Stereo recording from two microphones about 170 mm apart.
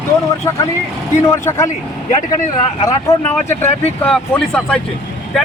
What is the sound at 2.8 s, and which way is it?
Speech, 15° left (ahead or behind).